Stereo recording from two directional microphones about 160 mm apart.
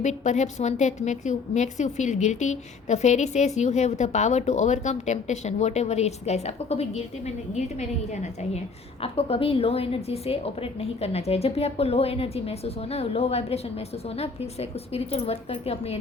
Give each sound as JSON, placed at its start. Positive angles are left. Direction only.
{"t": 0.0, "sound": "a woman's voice", "side_deg": 45}